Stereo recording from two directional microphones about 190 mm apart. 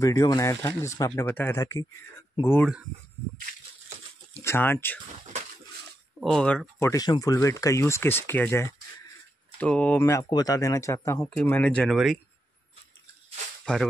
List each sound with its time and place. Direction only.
0.0 s speech: 15° left (ahead or behind)
4.4 s speech: 10° left (ahead or behind)
6.2 s speech: 5° left (ahead or behind)
13.7 s speech: 5° left (ahead or behind)